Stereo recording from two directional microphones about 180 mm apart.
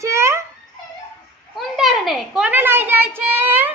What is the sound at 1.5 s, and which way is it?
A child's voice, centre (ahead or behind).